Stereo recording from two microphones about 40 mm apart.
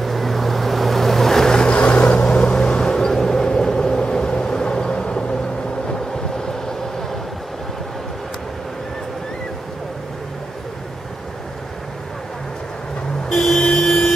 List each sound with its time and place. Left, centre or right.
0.0 s vehicle: centre
1.8 s vehicle: left
13.3 s vehicle: centre